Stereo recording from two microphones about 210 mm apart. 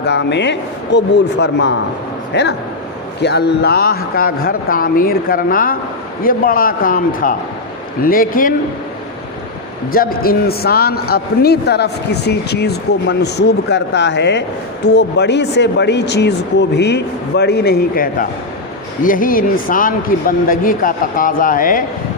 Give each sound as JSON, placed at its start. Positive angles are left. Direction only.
{"t": 0.0, "sound": "a man's voice", "side_deg": 55}
{"t": 9.9, "sound": "a man's voice", "side_deg": 45}